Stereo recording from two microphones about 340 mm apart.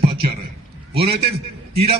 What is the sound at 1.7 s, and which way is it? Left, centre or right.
Speech, centre.